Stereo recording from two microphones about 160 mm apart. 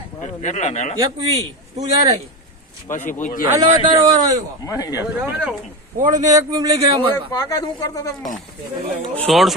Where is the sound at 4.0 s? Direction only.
25° right (ahead or behind).